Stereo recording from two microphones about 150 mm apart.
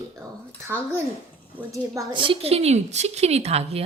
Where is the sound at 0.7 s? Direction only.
15° right (ahead or behind).